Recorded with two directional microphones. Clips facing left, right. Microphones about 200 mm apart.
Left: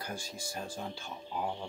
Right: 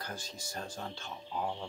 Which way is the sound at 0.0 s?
10° left (ahead or behind).